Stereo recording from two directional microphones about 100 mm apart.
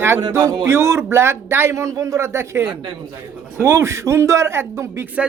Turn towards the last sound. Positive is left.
turn(degrees=-30)  # may be behind; listen again after turning